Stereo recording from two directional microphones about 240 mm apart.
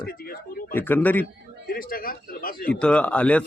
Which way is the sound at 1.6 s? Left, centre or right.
Left.